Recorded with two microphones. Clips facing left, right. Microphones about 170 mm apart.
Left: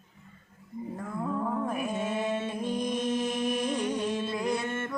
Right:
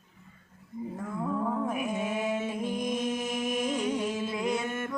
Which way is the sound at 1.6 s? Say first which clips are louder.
Even; 10° right (ahead or behind).